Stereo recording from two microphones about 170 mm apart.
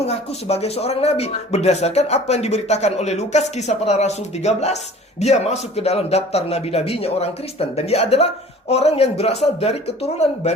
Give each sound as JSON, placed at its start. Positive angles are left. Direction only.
{"t": 0.0, "sound": "speech", "side_deg": 40}